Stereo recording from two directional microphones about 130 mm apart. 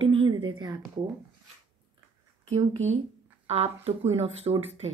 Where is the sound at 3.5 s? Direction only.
50° right (ahead or behind).